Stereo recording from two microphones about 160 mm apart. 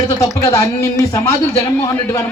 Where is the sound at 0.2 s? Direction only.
20° left (ahead or behind).